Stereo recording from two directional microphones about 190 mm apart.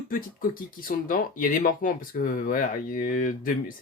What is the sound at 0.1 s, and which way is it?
Speech, 50° left (ahead or behind).